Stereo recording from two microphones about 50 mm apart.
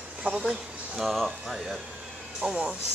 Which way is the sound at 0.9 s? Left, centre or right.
Centre.